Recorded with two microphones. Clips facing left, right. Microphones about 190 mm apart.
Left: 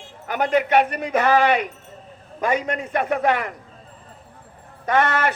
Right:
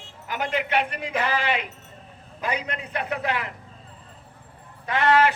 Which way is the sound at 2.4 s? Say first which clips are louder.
Left 7 dB; 45° left (ahead or behind).